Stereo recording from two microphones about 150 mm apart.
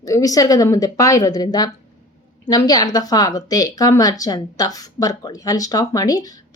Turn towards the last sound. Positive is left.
turn(degrees=25)  # may be behind; listen again after turning